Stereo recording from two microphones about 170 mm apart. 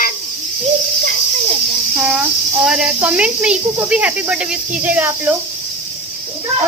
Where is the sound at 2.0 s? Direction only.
10° right (ahead or behind).